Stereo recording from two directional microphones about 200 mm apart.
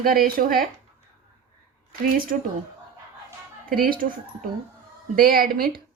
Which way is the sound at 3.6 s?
50° right (ahead or behind).